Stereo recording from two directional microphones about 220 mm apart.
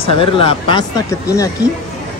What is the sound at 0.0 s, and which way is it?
Speech, 25° left (ahead or behind).